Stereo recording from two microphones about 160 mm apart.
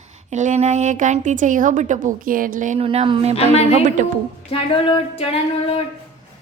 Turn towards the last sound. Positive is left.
turn(degrees=40)  # may be behind; listen again after turning